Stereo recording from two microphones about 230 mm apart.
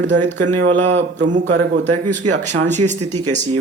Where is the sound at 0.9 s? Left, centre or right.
Right.